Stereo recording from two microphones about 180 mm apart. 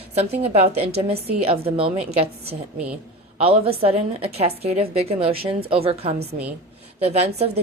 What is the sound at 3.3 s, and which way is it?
A woman's voice, 30° right (ahead or behind).